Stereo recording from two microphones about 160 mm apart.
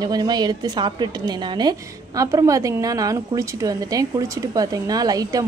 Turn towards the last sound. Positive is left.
turn(degrees=-25)  # may be behind; listen again after turning